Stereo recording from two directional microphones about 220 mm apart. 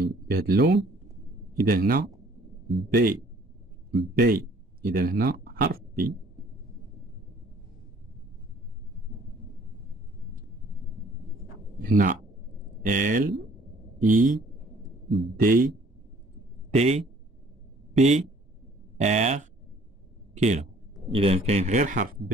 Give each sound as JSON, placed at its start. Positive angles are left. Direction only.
{"t": 0.0, "sound": "speech", "side_deg": -45}
{"t": 11.8, "sound": "a man's voice", "side_deg": -40}
{"t": 16.7, "sound": "speech", "side_deg": -30}
{"t": 21.1, "sound": "speech", "side_deg": -25}